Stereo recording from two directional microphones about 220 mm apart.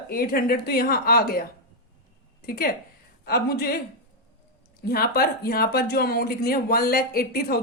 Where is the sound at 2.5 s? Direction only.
45° left (ahead or behind).